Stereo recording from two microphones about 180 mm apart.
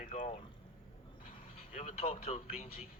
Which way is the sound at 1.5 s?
35° left (ahead or behind).